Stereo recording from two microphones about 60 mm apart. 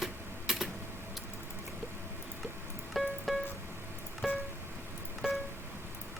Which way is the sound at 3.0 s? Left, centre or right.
Centre.